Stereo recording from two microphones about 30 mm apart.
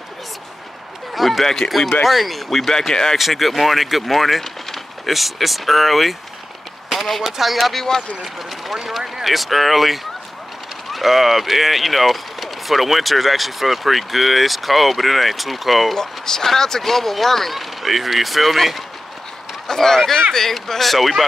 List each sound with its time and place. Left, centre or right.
1.1 s speech: centre
2.9 s speech: centre
3.2 s speech: centre
6.9 s a sound: centre
7.2 s speech: centre
7.7 s speech: centre
8.4 s speech: centre
15.9 s speech: centre
19.7 s speech: centre